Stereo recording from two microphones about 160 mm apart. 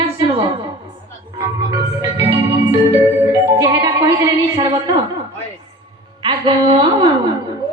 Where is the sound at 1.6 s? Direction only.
20° right (ahead or behind).